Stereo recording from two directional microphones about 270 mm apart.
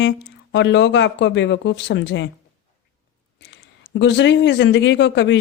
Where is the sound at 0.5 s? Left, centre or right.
Left.